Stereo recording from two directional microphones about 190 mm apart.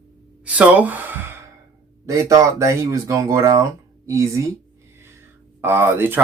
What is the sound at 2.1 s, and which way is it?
Speech, 15° right (ahead or behind).